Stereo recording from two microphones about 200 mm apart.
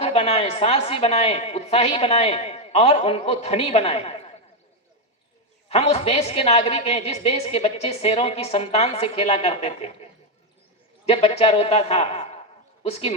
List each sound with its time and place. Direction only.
0.0 s a woman's voice: 30° left (ahead or behind)
5.6 s a woman's voice: 30° left (ahead or behind)
11.1 s a man's voice: 30° left (ahead or behind)